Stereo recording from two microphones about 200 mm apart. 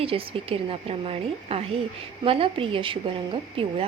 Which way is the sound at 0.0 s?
25° right (ahead or behind).